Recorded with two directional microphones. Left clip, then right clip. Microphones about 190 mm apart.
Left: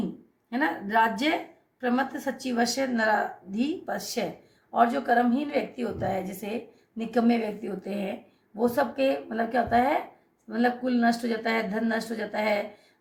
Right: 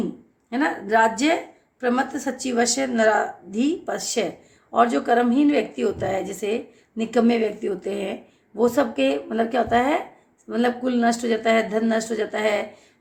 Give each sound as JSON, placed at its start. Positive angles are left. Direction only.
{"t": 0.5, "sound": "a woman's voice", "side_deg": -35}